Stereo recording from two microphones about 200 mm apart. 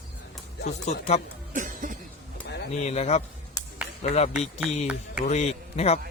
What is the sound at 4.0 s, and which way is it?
A man's voice, 30° left (ahead or behind).